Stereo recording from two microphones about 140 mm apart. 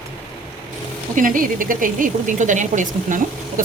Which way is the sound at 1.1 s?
75° right (ahead or behind).